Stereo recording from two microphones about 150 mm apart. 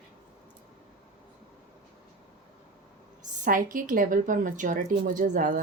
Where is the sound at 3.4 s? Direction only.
60° right (ahead or behind).